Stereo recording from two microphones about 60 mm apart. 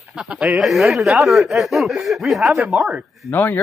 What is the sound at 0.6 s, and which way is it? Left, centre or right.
Speech, centre.